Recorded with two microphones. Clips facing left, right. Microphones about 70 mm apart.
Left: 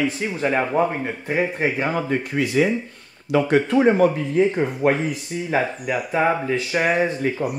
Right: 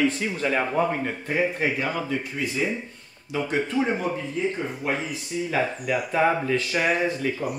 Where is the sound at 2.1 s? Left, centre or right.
Left.